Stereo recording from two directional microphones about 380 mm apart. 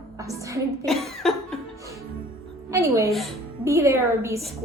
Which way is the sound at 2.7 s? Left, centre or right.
Centre.